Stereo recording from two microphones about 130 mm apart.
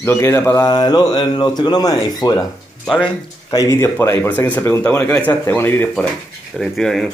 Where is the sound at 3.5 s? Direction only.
20° left (ahead or behind).